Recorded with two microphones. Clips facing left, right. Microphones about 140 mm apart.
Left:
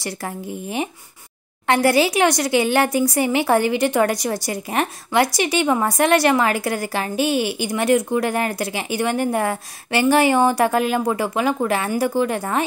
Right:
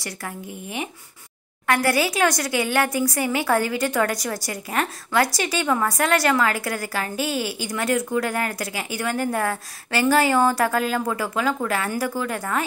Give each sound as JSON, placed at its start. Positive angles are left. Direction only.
{"t": 0.0, "sound": "speech", "side_deg": 30}